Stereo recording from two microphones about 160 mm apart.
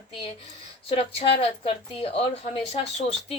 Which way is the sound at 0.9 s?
40° left (ahead or behind).